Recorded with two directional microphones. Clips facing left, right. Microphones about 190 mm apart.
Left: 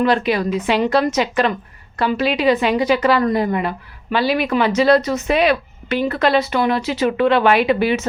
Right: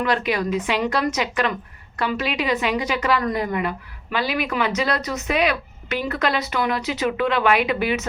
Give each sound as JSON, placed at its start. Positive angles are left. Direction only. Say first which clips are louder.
{"t": 0.0, "sound": "a woman's voice", "louder": "left 5 dB", "side_deg": 30}